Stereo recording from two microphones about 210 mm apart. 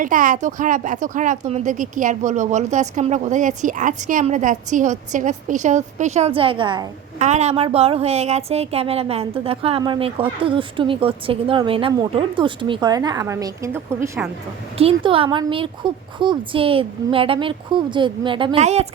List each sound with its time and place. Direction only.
0.0 s a woman's voice: 40° right (ahead or behind); by 14.3 s 10° right (ahead or behind)
14.8 s a woman's voice: 25° right (ahead or behind)